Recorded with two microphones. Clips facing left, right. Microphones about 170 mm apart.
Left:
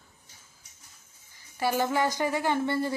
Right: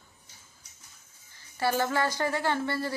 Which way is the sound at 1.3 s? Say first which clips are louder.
Even; 15° left (ahead or behind).